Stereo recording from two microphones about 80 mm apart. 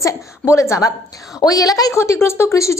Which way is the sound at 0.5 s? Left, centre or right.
Left.